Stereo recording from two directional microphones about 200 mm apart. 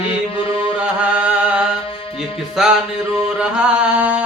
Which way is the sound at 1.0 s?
5° right (ahead or behind).